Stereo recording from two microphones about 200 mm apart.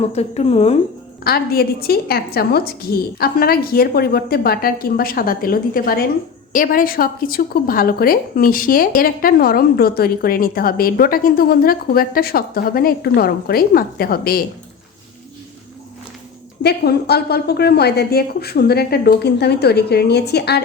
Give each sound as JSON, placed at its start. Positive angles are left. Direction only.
{"t": 0.1, "sound": "a woman's voice", "side_deg": 30}
{"t": 1.2, "sound": "a woman's voice", "side_deg": 50}
{"t": 16.6, "sound": "a woman's voice", "side_deg": 55}